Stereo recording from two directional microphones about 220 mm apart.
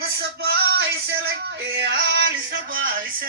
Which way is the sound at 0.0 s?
45° right (ahead or behind).